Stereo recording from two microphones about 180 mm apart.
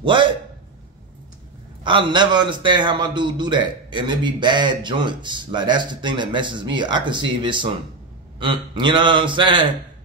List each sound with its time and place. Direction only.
0.0 s a man's voice: 25° right (ahead or behind)
1.9 s a man's voice: 25° right (ahead or behind)